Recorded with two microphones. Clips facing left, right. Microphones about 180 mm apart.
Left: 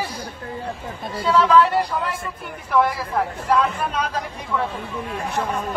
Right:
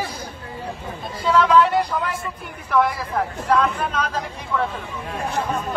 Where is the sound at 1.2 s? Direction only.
5° left (ahead or behind).